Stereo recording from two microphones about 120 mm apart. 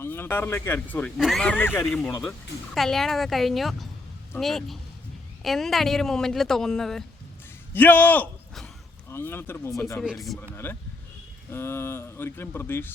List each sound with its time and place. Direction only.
0.0 s speech: 20° left (ahead or behind)
2.7 s speech: 5° left (ahead or behind)
7.7 s speech: 15° left (ahead or behind)
10.0 s speech: centre (ahead or behind)
10.6 s speech: 15° left (ahead or behind)